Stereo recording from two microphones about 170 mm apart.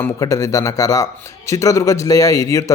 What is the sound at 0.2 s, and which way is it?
A man's voice, 20° left (ahead or behind).